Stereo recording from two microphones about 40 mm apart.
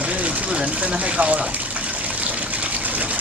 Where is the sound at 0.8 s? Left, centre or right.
Right.